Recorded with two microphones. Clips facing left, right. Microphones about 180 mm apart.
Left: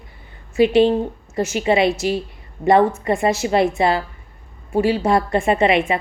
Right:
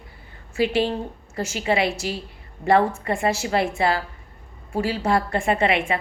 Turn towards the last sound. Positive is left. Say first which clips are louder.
# left 5 dB
turn(degrees=20)  # may be behind; listen again after turning